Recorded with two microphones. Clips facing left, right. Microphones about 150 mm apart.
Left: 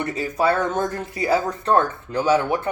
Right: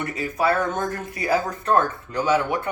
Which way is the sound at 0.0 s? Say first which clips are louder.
Left 2 dB; 30° left (ahead or behind).